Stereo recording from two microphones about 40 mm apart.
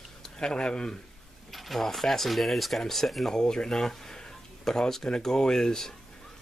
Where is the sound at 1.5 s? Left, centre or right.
Centre.